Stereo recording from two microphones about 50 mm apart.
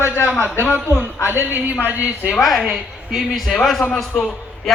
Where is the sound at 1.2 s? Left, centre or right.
Right.